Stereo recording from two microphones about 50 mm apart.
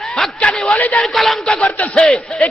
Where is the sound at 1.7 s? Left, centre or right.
Left.